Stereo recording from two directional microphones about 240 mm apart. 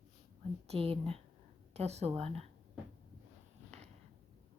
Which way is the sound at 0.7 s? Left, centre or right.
Right.